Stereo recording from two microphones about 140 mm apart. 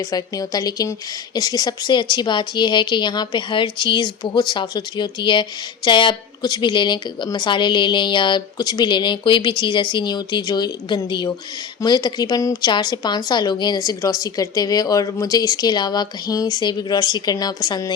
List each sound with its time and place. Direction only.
0.1 s a woman's voice: 25° left (ahead or behind)